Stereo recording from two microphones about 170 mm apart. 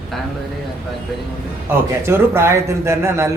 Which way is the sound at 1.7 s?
15° right (ahead or behind).